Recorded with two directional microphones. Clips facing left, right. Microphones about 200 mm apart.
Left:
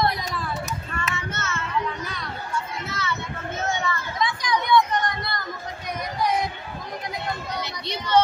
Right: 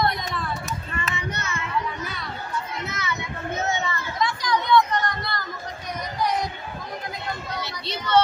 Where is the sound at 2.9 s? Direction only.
15° right (ahead or behind).